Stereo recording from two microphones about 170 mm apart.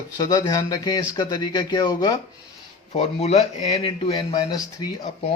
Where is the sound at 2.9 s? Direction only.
35° left (ahead or behind).